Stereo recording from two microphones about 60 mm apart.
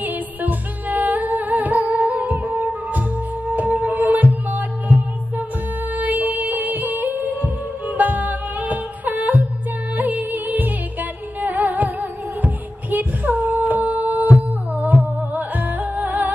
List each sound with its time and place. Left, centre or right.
0.0 s humming: right
3.5 s music: right
5.9 s music of bollywood: right
9.9 s music: right